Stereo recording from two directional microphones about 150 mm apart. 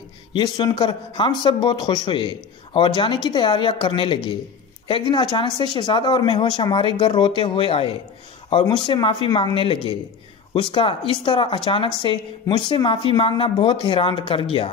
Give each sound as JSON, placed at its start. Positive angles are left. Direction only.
{"t": 0.3, "sound": "speech", "side_deg": 30}